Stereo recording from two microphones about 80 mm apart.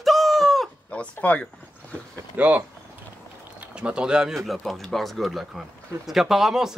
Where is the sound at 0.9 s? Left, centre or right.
Centre.